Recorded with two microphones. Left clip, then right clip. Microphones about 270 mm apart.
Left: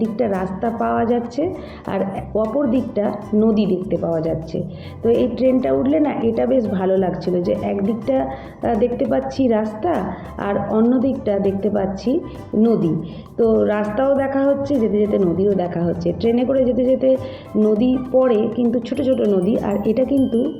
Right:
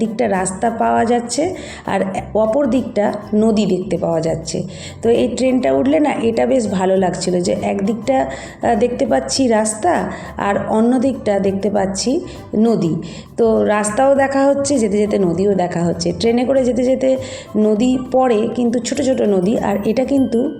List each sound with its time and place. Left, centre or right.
0.0 s a woman's voice: centre
13.3 s a woman's voice: right